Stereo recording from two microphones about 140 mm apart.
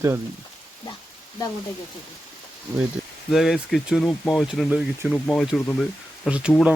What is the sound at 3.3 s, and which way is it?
Speech, 5° right (ahead or behind).